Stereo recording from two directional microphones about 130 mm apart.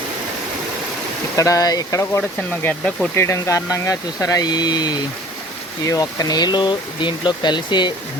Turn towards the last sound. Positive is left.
turn(degrees=35)  # may be behind; listen again after turning